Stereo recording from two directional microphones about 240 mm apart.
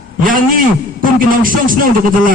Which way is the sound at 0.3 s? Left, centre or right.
Right.